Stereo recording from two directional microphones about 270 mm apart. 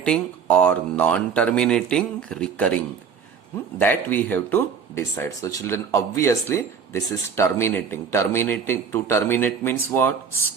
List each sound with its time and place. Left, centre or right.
0.0 s speech: centre
3.8 s speech: centre